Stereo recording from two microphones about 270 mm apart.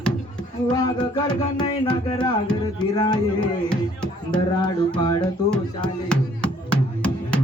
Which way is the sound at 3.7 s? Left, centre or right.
Centre.